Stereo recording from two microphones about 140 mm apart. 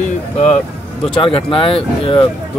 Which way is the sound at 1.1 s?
40° left (ahead or behind).